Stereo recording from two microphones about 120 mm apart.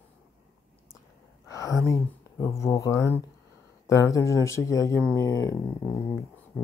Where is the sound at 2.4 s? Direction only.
25° left (ahead or behind).